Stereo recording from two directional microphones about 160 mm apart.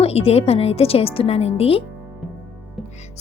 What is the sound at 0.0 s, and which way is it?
A woman's voice, 40° left (ahead or behind).